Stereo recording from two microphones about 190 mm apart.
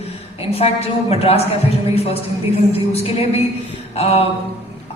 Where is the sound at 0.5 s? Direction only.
30° left (ahead or behind).